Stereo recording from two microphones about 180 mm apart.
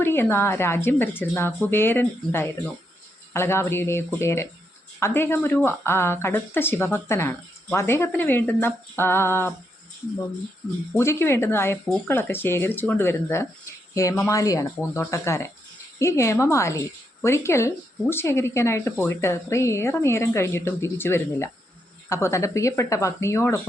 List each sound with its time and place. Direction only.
0.0 s speech: 10° left (ahead or behind)
10.9 s speech: 15° left (ahead or behind)